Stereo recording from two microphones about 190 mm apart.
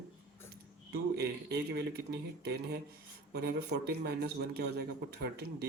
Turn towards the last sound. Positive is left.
turn(degrees=-60)  # may be behind; listen again after turning